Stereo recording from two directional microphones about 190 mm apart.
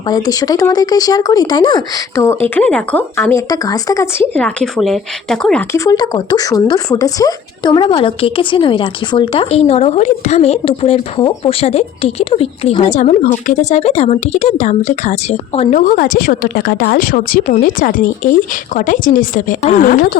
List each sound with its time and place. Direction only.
0.1 s speech: 20° left (ahead or behind); by 5.6 s 5° left (ahead or behind)
5.7 s speech: 15° left (ahead or behind); by 15.8 s 35° left (ahead or behind)
15.8 s speech: 45° left (ahead or behind)